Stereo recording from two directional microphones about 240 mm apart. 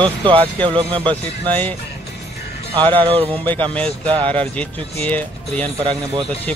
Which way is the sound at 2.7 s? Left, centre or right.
Right.